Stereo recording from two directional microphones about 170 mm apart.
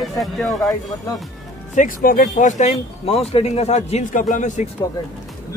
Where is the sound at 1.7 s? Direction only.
50° left (ahead or behind).